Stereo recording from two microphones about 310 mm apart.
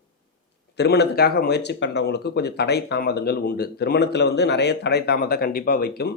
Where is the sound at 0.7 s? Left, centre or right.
Left.